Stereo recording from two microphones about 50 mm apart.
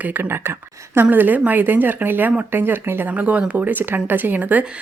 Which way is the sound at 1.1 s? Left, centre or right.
Right.